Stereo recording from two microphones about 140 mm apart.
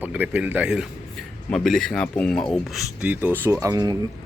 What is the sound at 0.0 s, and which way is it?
Speech, 10° right (ahead or behind).